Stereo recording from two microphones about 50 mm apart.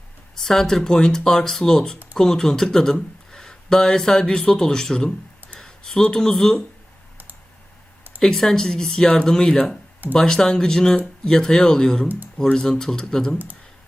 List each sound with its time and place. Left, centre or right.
0.3 s speech: centre
8.2 s speech: centre